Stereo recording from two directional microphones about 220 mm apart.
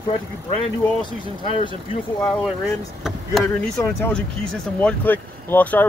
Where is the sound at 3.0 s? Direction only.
Centre (ahead or behind).